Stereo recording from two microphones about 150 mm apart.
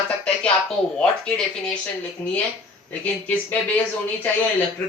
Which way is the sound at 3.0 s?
10° left (ahead or behind).